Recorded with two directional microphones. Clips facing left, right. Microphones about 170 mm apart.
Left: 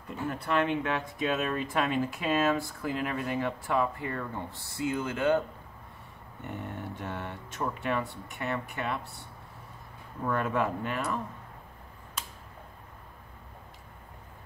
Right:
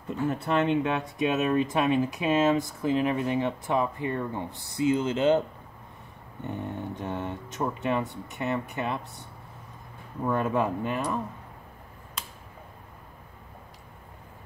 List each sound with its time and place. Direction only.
0.3 s speech: 25° right (ahead or behind)
6.4 s speech: 20° right (ahead or behind)
10.2 s speech: 15° right (ahead or behind)